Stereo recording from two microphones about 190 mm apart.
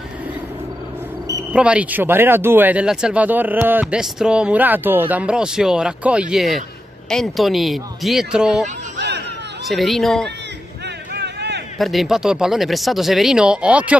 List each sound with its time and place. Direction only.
1.5 s speech: 5° right (ahead or behind)
8.9 s chatter: 65° right (ahead or behind)
9.7 s speech: centre (ahead or behind)
11.1 s a sound: 60° right (ahead or behind)
11.8 s speech: centre (ahead or behind)